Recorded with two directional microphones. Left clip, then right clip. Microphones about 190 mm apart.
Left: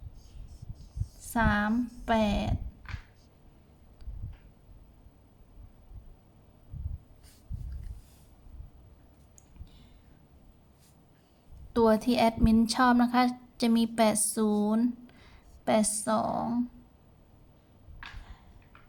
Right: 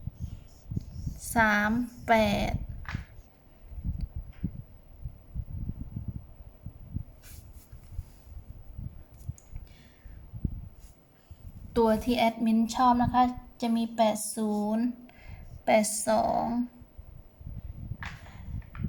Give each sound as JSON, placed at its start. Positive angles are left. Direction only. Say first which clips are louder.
{"t": 1.3, "sound": "a woman's voice", "louder": "right 4 dB", "side_deg": 0}
{"t": 11.7, "sound": "a woman's voice", "louder": "left 1 dB", "side_deg": 15}